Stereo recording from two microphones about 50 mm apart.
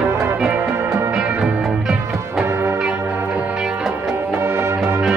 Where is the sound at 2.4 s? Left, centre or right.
Right.